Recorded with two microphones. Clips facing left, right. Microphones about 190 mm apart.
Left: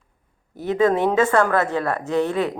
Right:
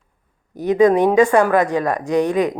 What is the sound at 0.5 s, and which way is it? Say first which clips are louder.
A woman's voice: right 5 dB; 15° right (ahead or behind).